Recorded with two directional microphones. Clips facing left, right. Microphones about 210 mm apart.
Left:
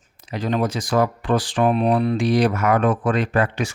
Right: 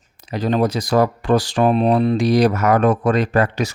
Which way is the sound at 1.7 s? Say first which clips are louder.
Right 3 dB; 30° right (ahead or behind).